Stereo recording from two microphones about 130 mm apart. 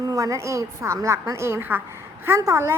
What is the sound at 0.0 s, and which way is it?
A woman's voice, 25° right (ahead or behind).